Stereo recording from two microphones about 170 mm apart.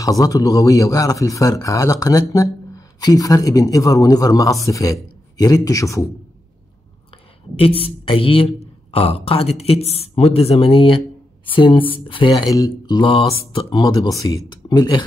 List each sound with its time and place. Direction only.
0.0 s a man's voice: 20° left (ahead or behind)
7.5 s a man's voice: 35° left (ahead or behind)